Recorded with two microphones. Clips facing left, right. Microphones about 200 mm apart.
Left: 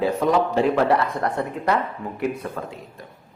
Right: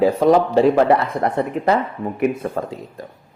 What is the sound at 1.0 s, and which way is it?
Speech, 25° right (ahead or behind).